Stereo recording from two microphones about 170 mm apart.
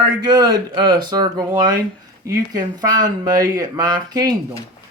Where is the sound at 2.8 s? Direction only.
25° right (ahead or behind).